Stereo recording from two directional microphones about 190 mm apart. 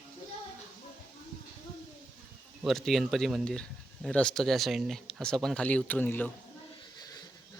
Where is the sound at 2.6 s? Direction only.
Centre (ahead or behind).